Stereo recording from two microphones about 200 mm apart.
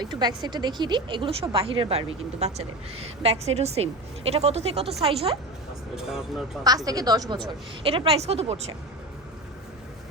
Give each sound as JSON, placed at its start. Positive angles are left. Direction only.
{"t": 0.0, "sound": "speech", "side_deg": -20}
{"t": 6.0, "sound": "speech", "side_deg": 0}
{"t": 6.7, "sound": "speech", "side_deg": -20}